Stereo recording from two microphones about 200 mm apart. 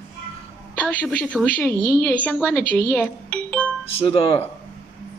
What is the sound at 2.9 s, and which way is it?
A child's voice, 10° left (ahead or behind).